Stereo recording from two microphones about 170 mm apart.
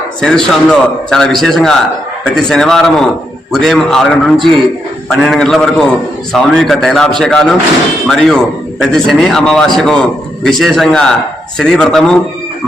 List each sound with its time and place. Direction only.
0.2 s a man's voice: 5° left (ahead or behind)